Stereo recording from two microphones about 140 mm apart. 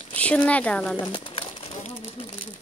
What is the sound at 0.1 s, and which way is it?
Speech, 10° left (ahead or behind).